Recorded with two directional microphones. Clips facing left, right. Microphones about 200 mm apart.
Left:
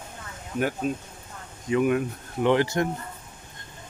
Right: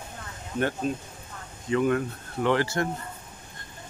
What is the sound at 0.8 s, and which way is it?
Speech, 10° left (ahead or behind).